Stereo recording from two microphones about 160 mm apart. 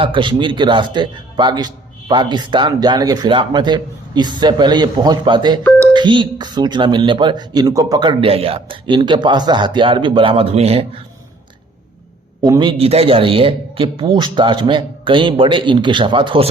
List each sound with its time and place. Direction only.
0.0 s a man's voice: 30° right (ahead or behind)
12.4 s a man's voice: 30° right (ahead or behind)